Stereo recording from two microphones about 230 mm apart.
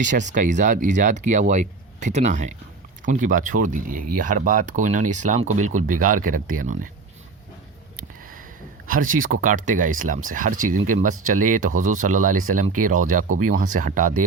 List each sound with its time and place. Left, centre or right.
0.0 s speech: right
9.2 s speech: right